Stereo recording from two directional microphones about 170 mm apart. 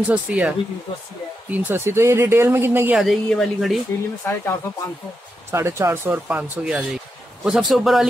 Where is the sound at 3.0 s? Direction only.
Centre (ahead or behind).